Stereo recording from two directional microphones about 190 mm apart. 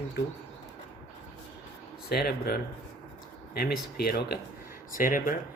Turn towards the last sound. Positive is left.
turn(degrees=45)  # may be behind; listen again after turning